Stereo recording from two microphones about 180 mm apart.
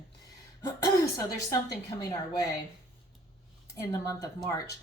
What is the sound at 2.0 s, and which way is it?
Speech, 20° left (ahead or behind).